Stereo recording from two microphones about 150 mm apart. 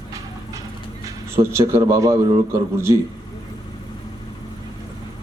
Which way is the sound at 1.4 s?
20° right (ahead or behind).